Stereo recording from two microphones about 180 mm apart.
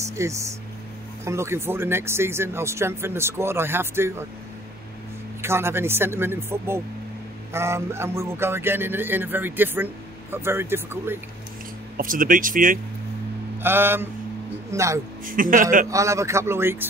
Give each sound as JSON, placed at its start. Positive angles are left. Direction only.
{"t": 0.0, "sound": "speech", "side_deg": -15}
{"t": 5.4, "sound": "speech", "side_deg": -15}
{"t": 12.0, "sound": "speech", "side_deg": -50}
{"t": 13.6, "sound": "speech", "side_deg": -10}
{"t": 15.2, "sound": "speech", "side_deg": -50}
{"t": 15.9, "sound": "speech", "side_deg": -15}